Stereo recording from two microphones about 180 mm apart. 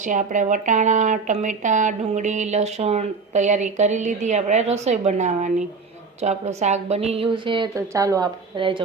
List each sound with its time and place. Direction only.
0.0 s speech: 45° right (ahead or behind); by 8.8 s 25° right (ahead or behind)